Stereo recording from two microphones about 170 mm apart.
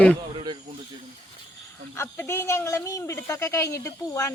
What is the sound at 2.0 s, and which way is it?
Speech, 15° left (ahead or behind).